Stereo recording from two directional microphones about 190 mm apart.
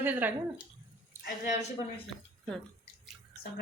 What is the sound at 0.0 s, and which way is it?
Speech, 10° right (ahead or behind).